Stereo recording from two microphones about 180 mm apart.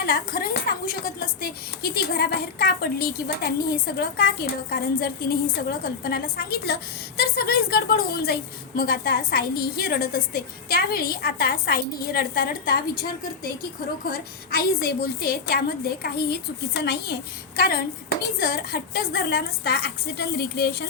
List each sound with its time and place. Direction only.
0.0 s a woman's voice: 55° left (ahead or behind)
14.1 s a woman's voice: 60° left (ahead or behind)